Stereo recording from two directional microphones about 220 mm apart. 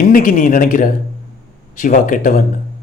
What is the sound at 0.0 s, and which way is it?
A man's voice, 40° left (ahead or behind).